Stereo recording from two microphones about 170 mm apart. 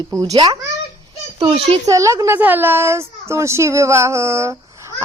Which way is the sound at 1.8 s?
20° right (ahead or behind).